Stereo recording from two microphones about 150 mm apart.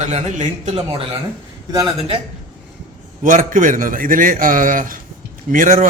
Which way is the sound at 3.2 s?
60° right (ahead or behind).